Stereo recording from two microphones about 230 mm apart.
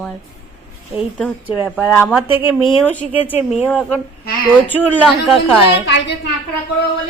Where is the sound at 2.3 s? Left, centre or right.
Left.